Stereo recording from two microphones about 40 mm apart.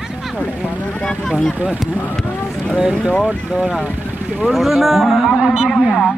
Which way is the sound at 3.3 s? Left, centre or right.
Right.